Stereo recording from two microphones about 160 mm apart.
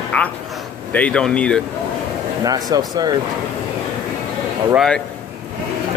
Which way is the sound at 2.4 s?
20° right (ahead or behind).